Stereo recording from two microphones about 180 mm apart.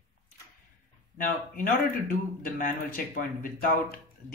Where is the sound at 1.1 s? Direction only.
50° left (ahead or behind).